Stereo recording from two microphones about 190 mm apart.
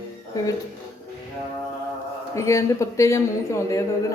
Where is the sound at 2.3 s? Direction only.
15° left (ahead or behind).